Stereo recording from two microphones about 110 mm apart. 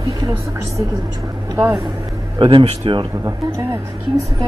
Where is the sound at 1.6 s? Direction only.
25° right (ahead or behind).